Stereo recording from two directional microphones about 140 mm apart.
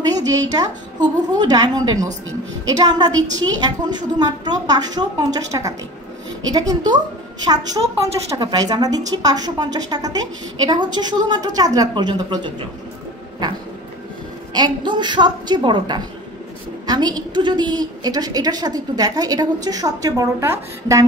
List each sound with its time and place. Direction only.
0.1 s a woman's voice: 25° right (ahead or behind)
8.3 s a woman's voice: 30° right (ahead or behind)
14.5 s a woman's voice: 30° right (ahead or behind)